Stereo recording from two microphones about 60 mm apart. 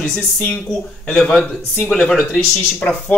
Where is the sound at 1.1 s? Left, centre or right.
Centre.